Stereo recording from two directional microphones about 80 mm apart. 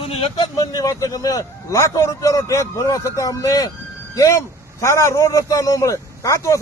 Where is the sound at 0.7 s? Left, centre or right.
Left.